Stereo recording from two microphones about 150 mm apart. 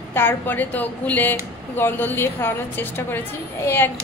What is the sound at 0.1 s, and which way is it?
A woman's voice, 15° left (ahead or behind).